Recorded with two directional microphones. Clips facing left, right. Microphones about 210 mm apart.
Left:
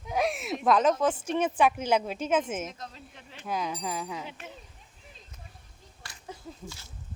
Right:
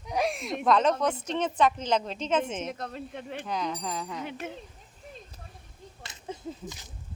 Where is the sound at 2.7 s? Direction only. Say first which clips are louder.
Right 8 dB; 60° right (ahead or behind).